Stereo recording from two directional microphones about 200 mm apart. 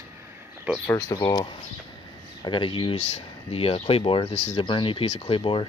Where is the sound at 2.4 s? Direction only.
25° left (ahead or behind).